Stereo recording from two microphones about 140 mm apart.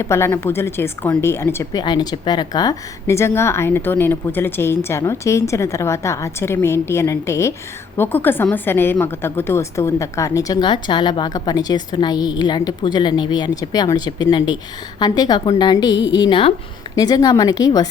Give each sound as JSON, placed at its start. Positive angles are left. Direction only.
{"t": 0.0, "sound": "a woman's voice", "side_deg": 20}
{"t": 1.8, "sound": "a woman's voice", "side_deg": 30}